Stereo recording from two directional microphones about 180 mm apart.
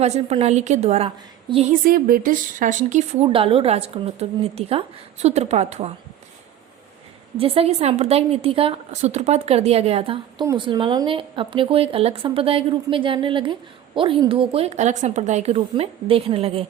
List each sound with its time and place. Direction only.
0.0 s speech: 35° right (ahead or behind)
1.7 s speech: 50° right (ahead or behind)
7.3 s a woman's voice: 30° right (ahead or behind)